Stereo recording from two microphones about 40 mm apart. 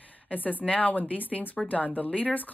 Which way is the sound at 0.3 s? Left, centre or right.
Left.